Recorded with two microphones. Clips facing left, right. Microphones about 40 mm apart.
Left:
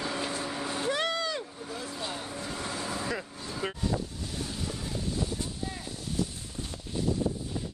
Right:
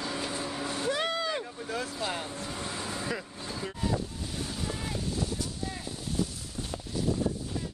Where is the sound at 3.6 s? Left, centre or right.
Left.